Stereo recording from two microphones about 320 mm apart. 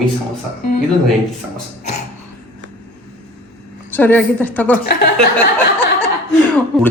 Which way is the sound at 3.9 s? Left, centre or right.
Centre.